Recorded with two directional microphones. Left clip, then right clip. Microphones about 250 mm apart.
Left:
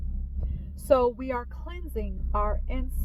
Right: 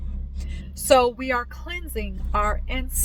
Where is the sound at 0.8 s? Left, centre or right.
Centre.